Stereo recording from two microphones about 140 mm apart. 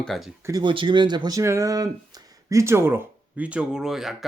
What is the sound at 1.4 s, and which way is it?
Speech, 20° right (ahead or behind).